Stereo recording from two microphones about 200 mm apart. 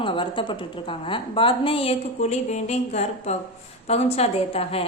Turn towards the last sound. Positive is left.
turn(degrees=30)  # may be behind; listen again after turning